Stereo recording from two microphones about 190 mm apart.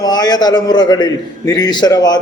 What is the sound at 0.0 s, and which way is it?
A man's voice, 20° left (ahead or behind).